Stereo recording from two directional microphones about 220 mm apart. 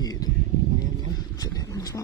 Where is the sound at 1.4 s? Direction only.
15° left (ahead or behind).